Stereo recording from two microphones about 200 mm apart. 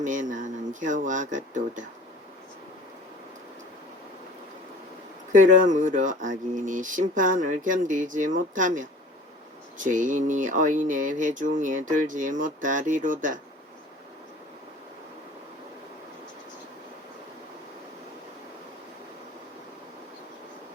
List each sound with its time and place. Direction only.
0.0 s speech: 40° right (ahead or behind)
5.3 s speech: 40° right (ahead or behind)